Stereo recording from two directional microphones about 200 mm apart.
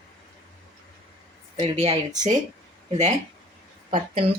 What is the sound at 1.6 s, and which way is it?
Speech, 30° right (ahead or behind).